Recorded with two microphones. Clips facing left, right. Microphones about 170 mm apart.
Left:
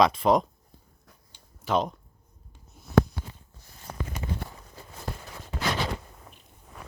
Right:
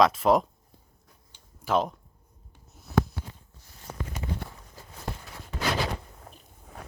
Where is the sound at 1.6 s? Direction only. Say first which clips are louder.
Even; 5° right (ahead or behind).